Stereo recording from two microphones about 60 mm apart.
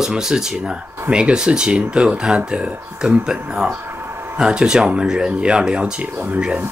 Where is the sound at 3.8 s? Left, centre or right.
Right.